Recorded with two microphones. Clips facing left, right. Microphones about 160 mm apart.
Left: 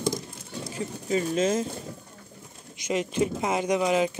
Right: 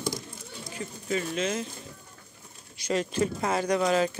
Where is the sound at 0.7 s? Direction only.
35° left (ahead or behind).